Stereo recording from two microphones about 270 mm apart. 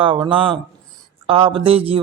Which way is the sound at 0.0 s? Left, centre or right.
Centre.